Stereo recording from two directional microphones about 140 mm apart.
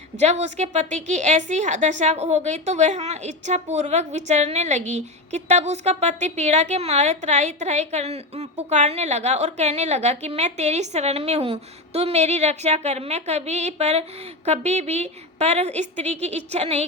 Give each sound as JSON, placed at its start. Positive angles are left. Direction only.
{"t": 0.2, "sound": "a woman's voice", "side_deg": -50}